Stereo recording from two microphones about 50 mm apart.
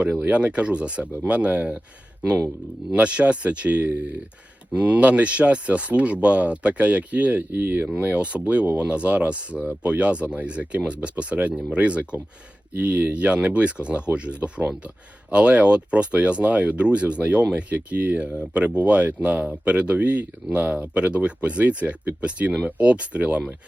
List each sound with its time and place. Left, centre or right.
0.0 s speech: right
2.9 s speech: right
8.0 s speech: right